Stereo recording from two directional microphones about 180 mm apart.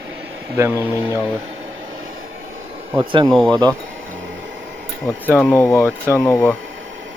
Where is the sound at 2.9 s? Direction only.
20° right (ahead or behind).